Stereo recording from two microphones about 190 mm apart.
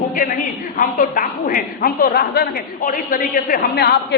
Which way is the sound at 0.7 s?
45° left (ahead or behind).